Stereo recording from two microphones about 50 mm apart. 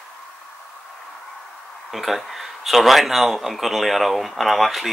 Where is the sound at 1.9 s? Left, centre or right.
Centre.